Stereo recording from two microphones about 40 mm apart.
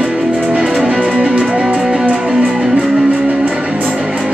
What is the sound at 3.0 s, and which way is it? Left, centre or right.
Music, right.